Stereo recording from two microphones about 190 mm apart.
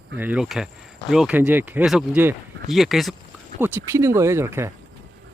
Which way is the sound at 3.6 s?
10° right (ahead or behind).